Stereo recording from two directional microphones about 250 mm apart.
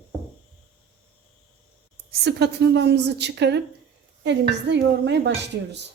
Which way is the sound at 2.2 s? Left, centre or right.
Right.